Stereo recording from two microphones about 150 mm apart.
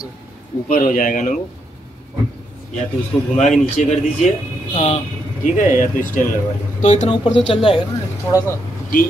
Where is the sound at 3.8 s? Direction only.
55° left (ahead or behind).